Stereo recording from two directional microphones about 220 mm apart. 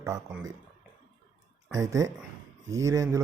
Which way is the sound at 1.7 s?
15° right (ahead or behind).